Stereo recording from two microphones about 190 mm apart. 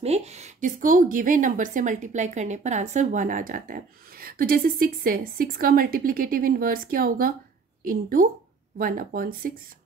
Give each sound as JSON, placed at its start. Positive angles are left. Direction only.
{"t": 0.0, "sound": "a woman's voice", "side_deg": -35}